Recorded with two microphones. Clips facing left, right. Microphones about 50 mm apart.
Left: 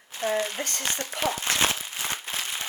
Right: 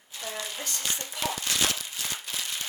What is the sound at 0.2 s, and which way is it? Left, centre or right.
Crumpling, left.